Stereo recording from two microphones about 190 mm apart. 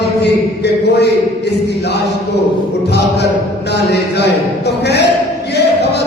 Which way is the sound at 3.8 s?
60° left (ahead or behind).